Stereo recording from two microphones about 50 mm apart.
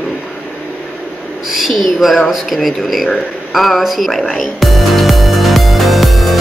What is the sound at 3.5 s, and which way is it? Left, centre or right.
Music, centre.